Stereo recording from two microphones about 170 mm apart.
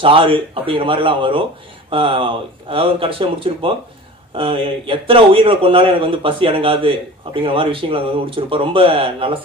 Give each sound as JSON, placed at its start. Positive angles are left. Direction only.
{"t": 0.0, "sound": "a man's voice", "side_deg": -30}